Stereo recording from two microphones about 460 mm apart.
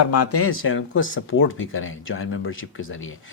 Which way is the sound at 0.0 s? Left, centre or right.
Left.